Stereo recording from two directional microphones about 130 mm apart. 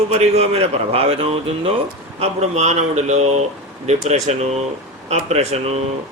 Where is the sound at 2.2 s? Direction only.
60° right (ahead or behind).